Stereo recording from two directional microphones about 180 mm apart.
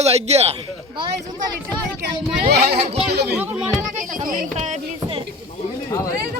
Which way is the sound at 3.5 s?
15° right (ahead or behind).